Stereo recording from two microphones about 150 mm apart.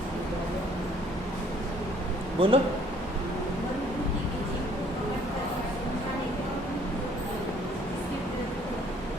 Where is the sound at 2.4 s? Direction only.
40° right (ahead or behind).